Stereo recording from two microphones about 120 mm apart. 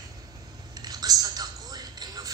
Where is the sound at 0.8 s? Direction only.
35° right (ahead or behind).